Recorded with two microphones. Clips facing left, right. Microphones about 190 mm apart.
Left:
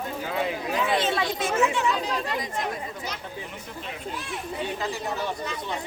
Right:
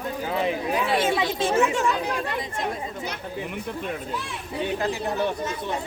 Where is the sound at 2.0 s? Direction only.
55° right (ahead or behind).